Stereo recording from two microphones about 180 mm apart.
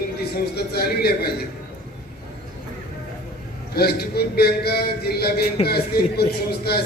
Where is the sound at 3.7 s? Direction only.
60° left (ahead or behind).